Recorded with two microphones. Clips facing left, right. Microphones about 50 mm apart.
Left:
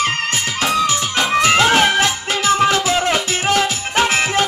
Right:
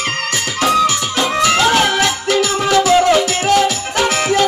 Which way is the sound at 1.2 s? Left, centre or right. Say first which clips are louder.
Left 1 dB; left.